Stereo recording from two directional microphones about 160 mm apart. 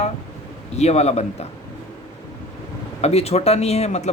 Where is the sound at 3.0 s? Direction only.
40° left (ahead or behind).